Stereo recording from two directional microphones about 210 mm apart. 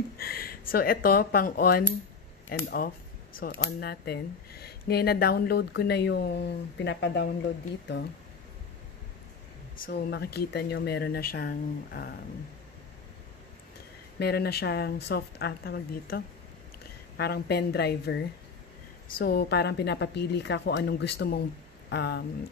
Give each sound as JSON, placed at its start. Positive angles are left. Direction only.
{"t": 0.2, "sound": "speech", "side_deg": 45}
{"t": 9.8, "sound": "speech", "side_deg": 50}
{"t": 14.2, "sound": "speech", "side_deg": 50}
{"t": 17.2, "sound": "speech", "side_deg": 50}